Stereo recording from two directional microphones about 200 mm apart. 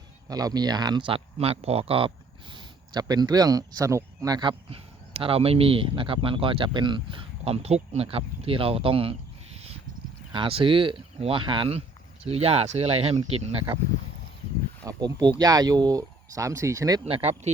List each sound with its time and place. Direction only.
0.3 s speech: 20° right (ahead or behind)
10.3 s speech: 25° right (ahead or behind)
14.8 s speech: 20° right (ahead or behind)
17.1 s speech: 30° right (ahead or behind)